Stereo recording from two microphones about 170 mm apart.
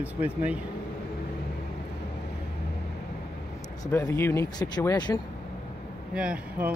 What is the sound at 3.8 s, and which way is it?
Speech, 15° left (ahead or behind).